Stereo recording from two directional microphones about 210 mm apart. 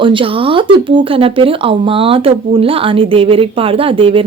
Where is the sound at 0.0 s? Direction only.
25° right (ahead or behind).